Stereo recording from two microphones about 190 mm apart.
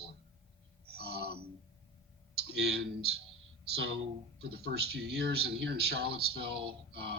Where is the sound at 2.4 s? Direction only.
60° right (ahead or behind).